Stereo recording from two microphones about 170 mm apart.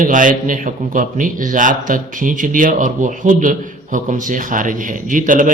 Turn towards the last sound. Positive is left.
turn(degrees=-50)  # may be behind; listen again after turning